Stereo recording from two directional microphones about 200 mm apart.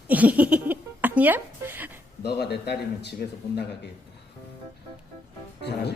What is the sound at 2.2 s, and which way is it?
Speech, 55° left (ahead or behind).